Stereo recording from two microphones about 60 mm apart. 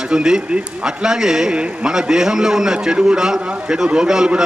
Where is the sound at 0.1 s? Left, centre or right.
Centre.